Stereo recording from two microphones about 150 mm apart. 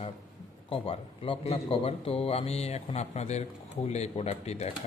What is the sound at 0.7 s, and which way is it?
A man's voice, 35° left (ahead or behind).